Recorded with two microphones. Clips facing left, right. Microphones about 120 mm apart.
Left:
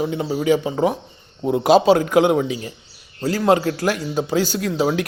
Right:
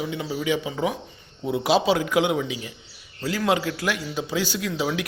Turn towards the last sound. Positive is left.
turn(degrees=45)  # may be behind; listen again after turning